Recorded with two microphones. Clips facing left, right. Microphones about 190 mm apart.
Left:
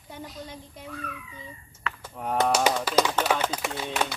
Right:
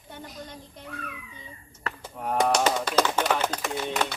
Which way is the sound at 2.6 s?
10° left (ahead or behind).